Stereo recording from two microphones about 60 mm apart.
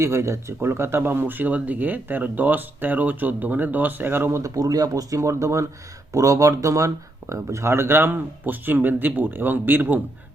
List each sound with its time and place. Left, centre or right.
0.0 s speech: right
4.4 s speech: right